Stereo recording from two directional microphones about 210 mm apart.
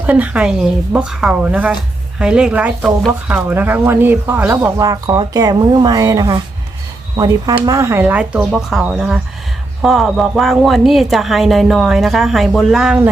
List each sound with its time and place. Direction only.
0.0 s a woman's voice: 5° right (ahead or behind)